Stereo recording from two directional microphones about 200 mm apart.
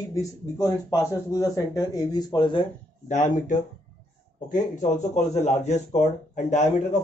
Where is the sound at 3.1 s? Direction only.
35° left (ahead or behind).